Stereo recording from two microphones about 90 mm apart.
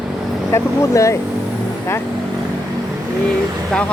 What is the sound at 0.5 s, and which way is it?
Speech, 35° left (ahead or behind).